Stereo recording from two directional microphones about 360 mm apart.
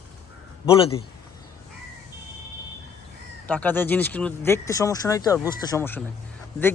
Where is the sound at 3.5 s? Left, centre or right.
Centre.